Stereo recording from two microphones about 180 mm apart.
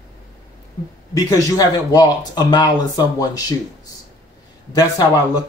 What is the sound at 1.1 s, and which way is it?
Speech, 20° left (ahead or behind).